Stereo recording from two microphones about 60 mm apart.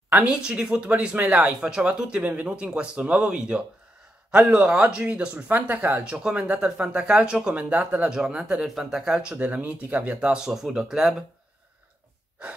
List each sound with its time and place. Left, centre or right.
0.3 s speech: centre; by 6.0 s right
6.0 s speech: centre
10.3 s speech: centre